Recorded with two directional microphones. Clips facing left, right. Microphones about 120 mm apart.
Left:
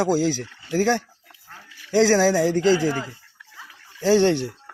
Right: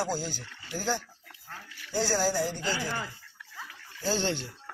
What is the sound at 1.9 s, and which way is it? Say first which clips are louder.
Speech: left 11 dB; 90° left.